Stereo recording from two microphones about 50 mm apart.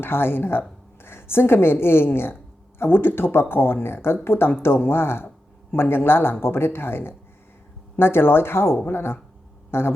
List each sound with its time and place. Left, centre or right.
0.0 s a woman's voice: left